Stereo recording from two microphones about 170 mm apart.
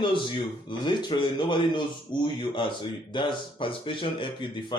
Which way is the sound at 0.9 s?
25° left (ahead or behind).